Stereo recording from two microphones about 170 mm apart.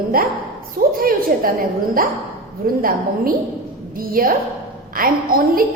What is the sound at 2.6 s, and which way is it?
A woman's voice, 60° right (ahead or behind).